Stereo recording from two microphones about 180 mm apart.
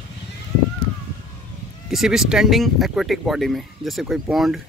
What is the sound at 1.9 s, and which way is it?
Speech, centre (ahead or behind).